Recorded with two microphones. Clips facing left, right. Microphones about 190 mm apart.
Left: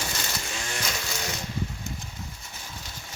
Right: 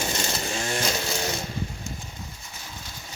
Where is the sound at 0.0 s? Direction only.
25° right (ahead or behind).